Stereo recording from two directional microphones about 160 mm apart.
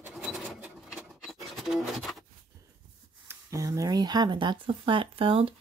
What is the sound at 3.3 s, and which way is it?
Speech, 20° right (ahead or behind).